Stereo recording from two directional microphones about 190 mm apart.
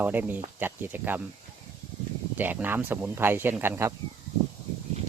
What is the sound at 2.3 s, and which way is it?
Speech, 10° right (ahead or behind).